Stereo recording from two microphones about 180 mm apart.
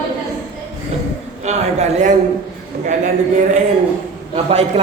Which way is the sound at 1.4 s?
40° right (ahead or behind).